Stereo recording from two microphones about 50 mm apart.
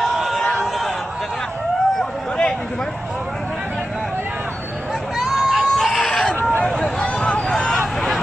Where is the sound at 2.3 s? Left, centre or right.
Centre.